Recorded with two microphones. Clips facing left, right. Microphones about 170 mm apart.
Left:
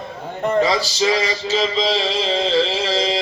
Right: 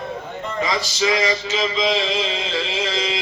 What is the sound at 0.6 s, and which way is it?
Male singing, 30° left (ahead or behind).